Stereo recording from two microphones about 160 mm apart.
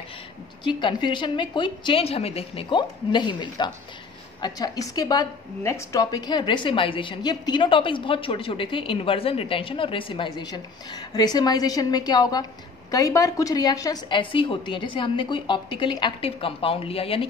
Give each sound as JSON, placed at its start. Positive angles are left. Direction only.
{"t": 0.7, "sound": "a woman's voice", "side_deg": 30}